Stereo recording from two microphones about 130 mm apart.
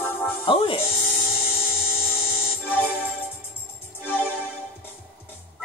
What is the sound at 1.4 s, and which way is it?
Dental drill, 15° left (ahead or behind).